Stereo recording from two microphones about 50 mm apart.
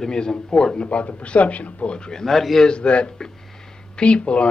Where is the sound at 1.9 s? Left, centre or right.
Centre.